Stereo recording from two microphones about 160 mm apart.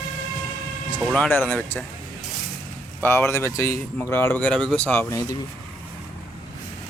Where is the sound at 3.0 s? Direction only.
15° left (ahead or behind).